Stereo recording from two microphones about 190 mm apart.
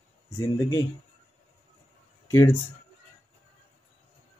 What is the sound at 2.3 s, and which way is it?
Speech, 10° left (ahead or behind).